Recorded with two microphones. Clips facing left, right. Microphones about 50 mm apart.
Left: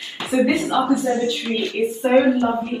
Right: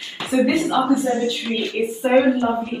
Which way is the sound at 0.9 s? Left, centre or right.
Right.